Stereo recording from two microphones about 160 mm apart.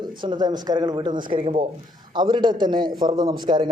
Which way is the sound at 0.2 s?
25° right (ahead or behind).